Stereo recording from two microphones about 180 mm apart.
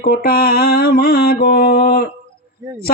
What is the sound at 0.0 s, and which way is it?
Speech, 60° left (ahead or behind).